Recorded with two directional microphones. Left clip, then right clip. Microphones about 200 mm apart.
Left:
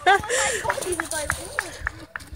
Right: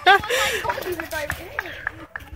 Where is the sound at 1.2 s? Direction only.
45° right (ahead or behind).